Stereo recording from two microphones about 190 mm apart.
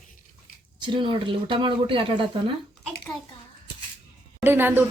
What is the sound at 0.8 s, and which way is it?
Speech, 25° right (ahead or behind).